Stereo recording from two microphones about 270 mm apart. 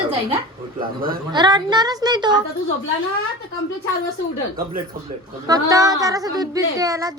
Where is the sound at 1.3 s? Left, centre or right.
Centre.